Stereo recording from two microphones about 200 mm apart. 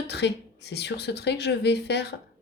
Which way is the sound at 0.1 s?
55° left (ahead or behind).